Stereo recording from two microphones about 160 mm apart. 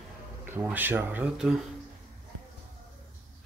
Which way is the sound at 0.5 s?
10° right (ahead or behind).